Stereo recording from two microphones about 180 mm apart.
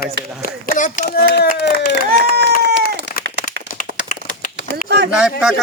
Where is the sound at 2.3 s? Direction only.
65° right (ahead or behind).